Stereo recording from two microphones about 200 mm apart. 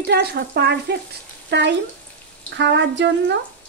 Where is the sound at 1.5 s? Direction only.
60° right (ahead or behind).